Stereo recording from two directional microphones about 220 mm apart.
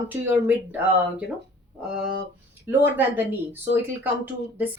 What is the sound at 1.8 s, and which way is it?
Speech, 5° right (ahead or behind).